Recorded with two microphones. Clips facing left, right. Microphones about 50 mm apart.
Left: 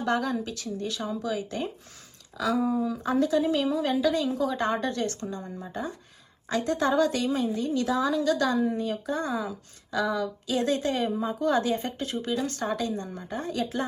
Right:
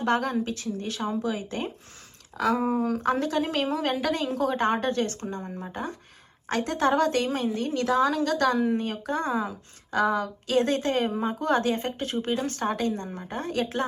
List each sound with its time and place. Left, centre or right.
0.0 s speech: right
2.8 s a woman's voice: right